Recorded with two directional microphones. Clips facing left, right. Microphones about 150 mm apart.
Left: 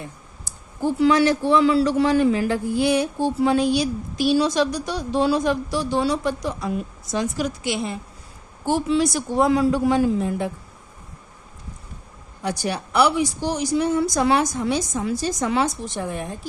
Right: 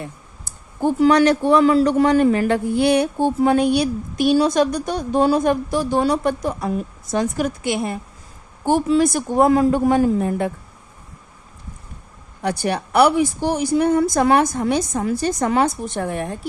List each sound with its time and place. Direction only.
0.4 s a man's voice: 55° right (ahead or behind)
12.4 s a woman's voice: 60° right (ahead or behind)